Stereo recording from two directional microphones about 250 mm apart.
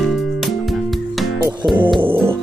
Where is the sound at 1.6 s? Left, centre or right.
Centre.